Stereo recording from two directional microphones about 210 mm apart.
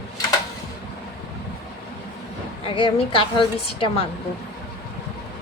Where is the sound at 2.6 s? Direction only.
25° left (ahead or behind).